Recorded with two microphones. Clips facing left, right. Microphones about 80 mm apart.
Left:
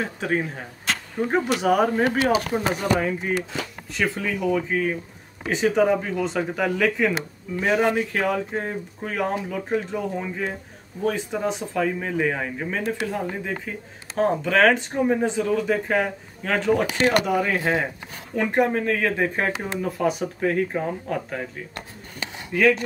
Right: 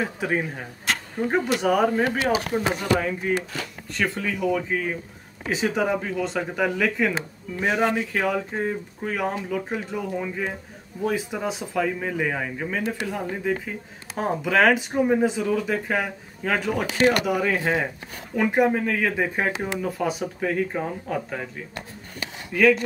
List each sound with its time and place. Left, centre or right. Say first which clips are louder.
0.0 s speech: even; centre
3.2 s speech: even; centre
3.9 s speech: left 1 dB; centre
22.5 s speech: right 1 dB; centre